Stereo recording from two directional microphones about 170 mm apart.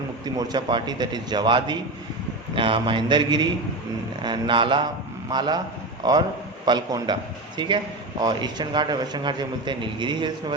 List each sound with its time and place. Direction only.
0.3 s a man's voice: 25° right (ahead or behind)